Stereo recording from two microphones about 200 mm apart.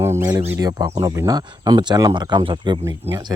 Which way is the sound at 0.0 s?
15° right (ahead or behind).